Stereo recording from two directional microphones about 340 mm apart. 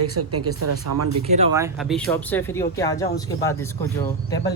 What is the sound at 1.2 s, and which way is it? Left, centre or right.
Speech, centre.